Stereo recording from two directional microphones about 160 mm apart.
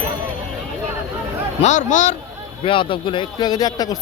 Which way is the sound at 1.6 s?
50° left (ahead or behind).